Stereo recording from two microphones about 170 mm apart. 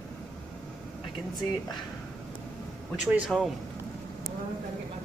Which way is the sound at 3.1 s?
5° right (ahead or behind).